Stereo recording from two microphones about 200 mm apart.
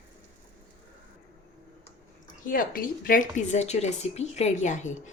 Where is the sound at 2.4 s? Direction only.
45° left (ahead or behind).